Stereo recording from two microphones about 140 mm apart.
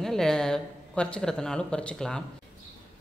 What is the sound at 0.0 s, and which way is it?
A woman's voice, 5° left (ahead or behind).